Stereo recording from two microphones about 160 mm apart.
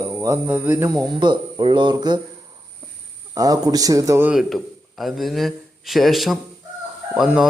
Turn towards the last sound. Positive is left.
turn(degrees=-5)  # may be behind; listen again after turning